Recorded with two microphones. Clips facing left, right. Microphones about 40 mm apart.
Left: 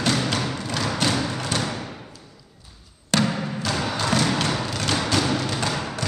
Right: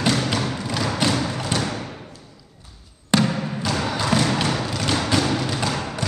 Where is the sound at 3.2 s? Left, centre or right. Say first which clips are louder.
Right 1 dB; centre.